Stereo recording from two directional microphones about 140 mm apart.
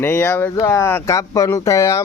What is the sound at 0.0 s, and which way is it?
Speech, 15° left (ahead or behind).